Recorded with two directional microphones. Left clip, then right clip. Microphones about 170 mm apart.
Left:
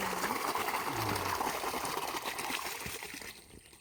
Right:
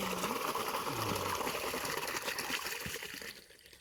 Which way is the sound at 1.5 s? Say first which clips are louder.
Left 2 dB; 15° left (ahead or behind).